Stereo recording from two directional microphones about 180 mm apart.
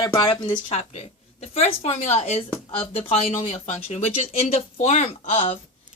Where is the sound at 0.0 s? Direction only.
25° left (ahead or behind).